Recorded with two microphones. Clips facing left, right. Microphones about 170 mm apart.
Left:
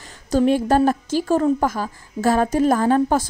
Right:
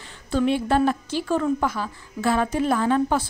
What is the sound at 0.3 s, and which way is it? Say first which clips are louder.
A woman's voice: left 4 dB; 40° left (ahead or behind).